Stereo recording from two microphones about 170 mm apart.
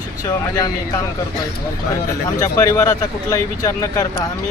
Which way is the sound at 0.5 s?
20° left (ahead or behind).